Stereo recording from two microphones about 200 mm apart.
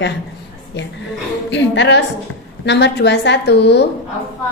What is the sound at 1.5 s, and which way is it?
A woman's voice, 65° left (ahead or behind).